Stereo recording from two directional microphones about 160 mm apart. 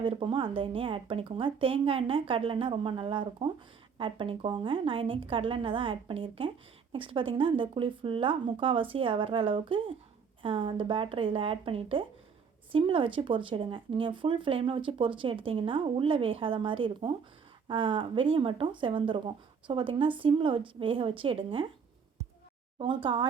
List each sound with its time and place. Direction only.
0.0 s speech: 35° right (ahead or behind)
23.1 s speech: 35° right (ahead or behind)